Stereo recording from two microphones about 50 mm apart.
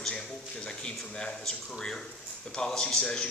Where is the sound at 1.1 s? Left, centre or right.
Centre.